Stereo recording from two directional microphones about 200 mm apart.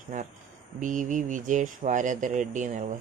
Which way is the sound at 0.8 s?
40° right (ahead or behind).